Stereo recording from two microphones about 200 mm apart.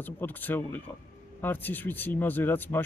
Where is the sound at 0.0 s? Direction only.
10° left (ahead or behind).